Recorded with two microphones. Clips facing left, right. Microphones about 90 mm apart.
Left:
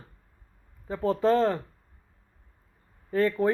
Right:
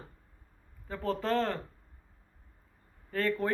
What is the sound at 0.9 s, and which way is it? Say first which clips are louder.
Speech: left 8 dB; 15° left (ahead or behind).